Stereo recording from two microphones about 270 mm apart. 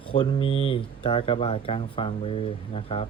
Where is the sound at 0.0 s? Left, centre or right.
Centre.